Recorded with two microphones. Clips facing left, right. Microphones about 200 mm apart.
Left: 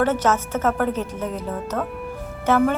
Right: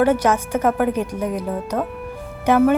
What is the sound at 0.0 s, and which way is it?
A woman's voice, 10° right (ahead or behind).